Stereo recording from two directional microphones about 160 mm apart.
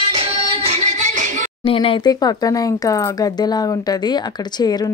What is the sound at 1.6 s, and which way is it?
A woman's voice, 35° left (ahead or behind).